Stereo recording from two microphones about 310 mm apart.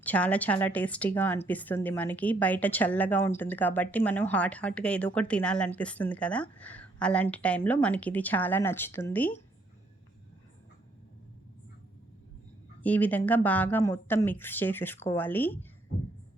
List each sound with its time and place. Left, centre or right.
0.0 s a woman's voice: centre
12.8 s a woman's voice: centre